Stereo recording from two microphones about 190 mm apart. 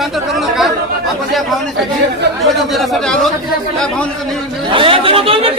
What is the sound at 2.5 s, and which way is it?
Speech, centre (ahead or behind).